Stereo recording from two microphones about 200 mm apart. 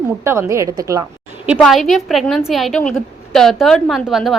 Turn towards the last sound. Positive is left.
turn(degrees=0)  # may be behind; listen again after turning